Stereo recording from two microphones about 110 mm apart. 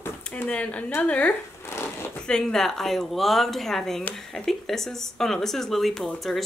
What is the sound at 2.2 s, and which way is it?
Speech, 5° left (ahead or behind).